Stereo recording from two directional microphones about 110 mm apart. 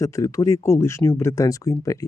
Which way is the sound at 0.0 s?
30° left (ahead or behind).